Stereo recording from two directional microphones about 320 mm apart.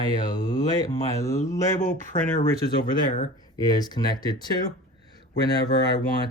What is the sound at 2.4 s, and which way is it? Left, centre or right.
Speech, left.